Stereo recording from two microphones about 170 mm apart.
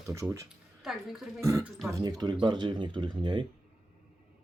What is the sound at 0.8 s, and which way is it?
Speech, centre (ahead or behind).